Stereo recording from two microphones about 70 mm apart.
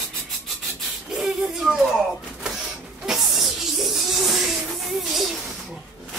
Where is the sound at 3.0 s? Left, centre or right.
Centre.